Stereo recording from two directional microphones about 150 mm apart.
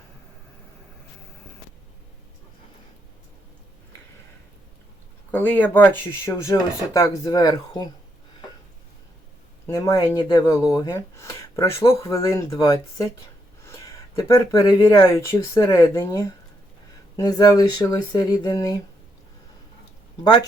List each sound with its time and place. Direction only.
5.3 s speech: 10° left (ahead or behind)
9.6 s speech: 20° left (ahead or behind)